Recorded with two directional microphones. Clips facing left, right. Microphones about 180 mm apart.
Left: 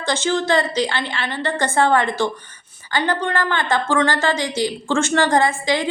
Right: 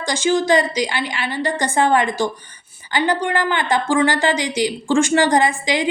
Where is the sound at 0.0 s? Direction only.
10° right (ahead or behind).